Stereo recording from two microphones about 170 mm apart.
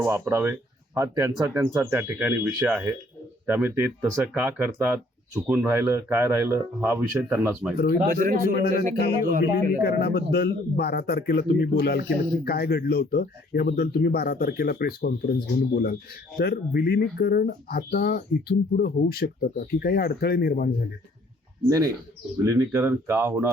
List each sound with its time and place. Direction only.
0.0 s a man's voice: 15° right (ahead or behind)
5.5 s a man's voice: 15° right (ahead or behind)
8.1 s speech: 55° right (ahead or behind)
9.8 s speech: 70° left (ahead or behind)
22.4 s a man's voice: 15° right (ahead or behind)